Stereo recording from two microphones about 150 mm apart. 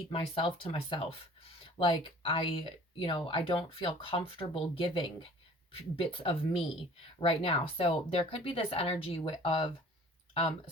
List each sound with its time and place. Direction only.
0.1 s speech: 35° left (ahead or behind)